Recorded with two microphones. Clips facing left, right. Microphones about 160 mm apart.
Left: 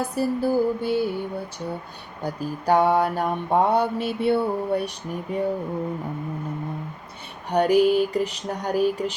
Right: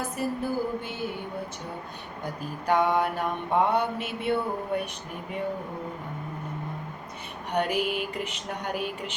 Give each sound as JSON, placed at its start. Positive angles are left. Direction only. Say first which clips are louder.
{"t": 0.0, "sound": "mantra", "louder": "left 6 dB", "side_deg": 35}
{"t": 2.2, "sound": "mantra", "louder": "left 6 dB", "side_deg": 35}
{"t": 7.5, "sound": "mantra", "louder": "left 9 dB", "side_deg": 35}